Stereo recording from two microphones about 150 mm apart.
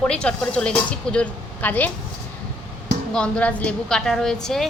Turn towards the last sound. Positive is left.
turn(degrees=0)  # may be behind; listen again after turning